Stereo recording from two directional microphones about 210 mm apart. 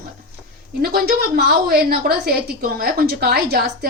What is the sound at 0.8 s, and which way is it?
A woman's voice, 45° right (ahead or behind).